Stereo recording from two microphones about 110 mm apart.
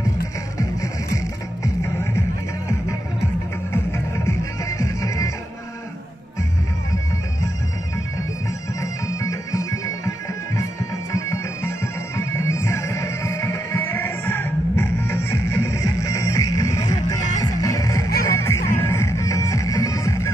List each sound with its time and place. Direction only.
0.6 s music: 30° left (ahead or behind)
3.7 s music: 25° left (ahead or behind)
9.0 s music: 30° left (ahead or behind)